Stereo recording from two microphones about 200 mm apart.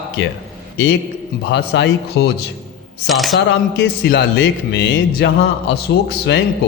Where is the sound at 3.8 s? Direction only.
55° left (ahead or behind).